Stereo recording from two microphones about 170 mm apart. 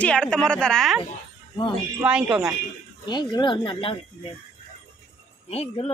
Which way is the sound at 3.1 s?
25° left (ahead or behind).